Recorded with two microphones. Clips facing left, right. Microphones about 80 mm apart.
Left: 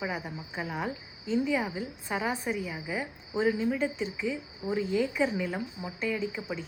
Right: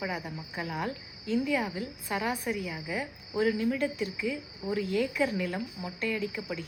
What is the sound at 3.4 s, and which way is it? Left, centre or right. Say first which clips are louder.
Speech: even; left.